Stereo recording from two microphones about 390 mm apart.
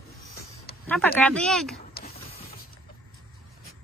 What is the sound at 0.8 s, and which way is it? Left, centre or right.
Speech, centre.